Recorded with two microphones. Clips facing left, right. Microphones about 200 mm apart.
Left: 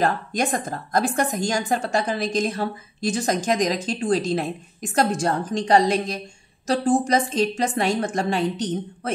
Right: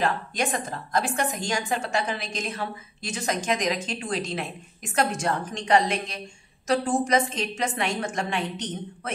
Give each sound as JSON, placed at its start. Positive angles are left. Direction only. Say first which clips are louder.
{"t": 0.0, "sound": "a woman's voice", "louder": "left 4 dB", "side_deg": 40}